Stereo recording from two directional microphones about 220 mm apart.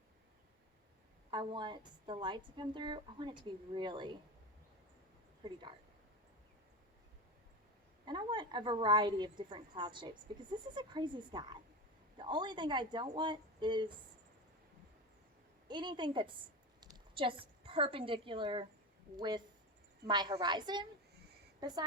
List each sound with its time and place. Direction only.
1.3 s a woman's voice: 20° right (ahead or behind)
5.4 s speech: 20° right (ahead or behind)
8.0 s a woman's voice: 20° right (ahead or behind)
15.6 s a woman's voice: 20° right (ahead or behind)